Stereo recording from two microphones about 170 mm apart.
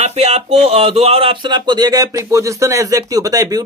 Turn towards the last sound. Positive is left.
turn(degrees=-20)  # may be behind; listen again after turning